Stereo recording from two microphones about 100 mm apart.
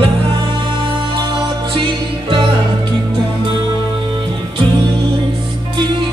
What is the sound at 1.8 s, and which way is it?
Music, 55° right (ahead or behind).